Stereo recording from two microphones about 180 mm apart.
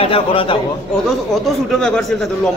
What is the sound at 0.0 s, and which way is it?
Speech, 30° left (ahead or behind).